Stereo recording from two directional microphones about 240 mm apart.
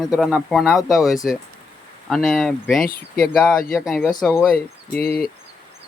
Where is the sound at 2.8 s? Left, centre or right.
Left.